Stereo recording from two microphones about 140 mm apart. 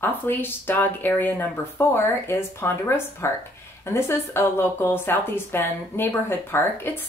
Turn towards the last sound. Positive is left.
turn(degrees=15)  # may be behind; listen again after turning